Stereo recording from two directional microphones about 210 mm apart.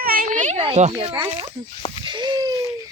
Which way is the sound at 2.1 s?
20° right (ahead or behind).